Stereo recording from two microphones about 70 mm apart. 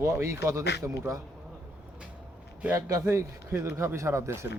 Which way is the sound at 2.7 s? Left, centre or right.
Right.